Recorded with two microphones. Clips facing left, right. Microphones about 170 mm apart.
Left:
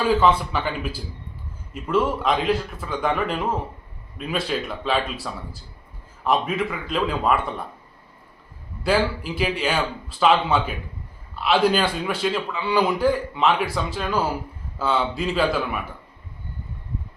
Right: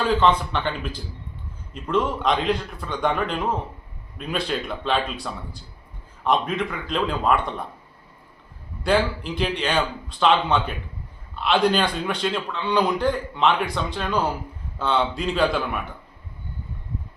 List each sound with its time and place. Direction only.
0.0 s a man's voice: 5° left (ahead or behind)
8.8 s a man's voice: 5° left (ahead or behind)